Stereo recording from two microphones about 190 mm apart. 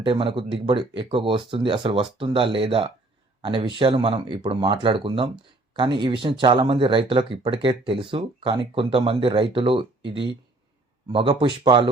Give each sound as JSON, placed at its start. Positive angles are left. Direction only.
{"t": 0.0, "sound": "speech", "side_deg": -25}
{"t": 11.1, "sound": "speech", "side_deg": -30}